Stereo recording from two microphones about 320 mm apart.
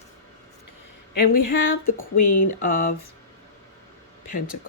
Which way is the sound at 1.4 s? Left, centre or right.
Left.